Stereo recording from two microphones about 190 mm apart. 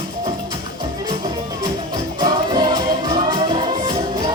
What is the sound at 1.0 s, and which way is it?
Music, 20° right (ahead or behind).